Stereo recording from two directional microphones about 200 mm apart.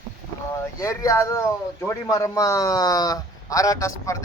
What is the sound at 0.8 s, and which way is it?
Speech, 15° left (ahead or behind).